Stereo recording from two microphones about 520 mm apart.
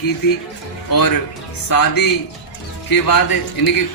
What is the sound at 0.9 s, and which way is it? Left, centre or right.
A man's voice, left.